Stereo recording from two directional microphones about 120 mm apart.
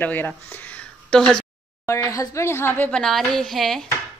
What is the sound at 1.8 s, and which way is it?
Speech, 25° left (ahead or behind).